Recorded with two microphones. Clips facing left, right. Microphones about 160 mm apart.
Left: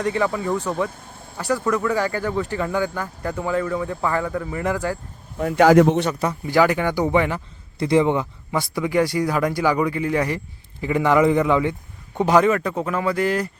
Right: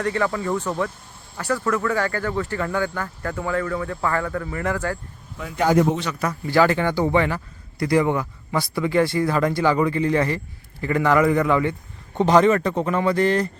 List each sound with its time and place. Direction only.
0.0 s speech: 15° left (ahead or behind)
5.5 s speech: 80° left
6.4 s speech: 15° left (ahead or behind)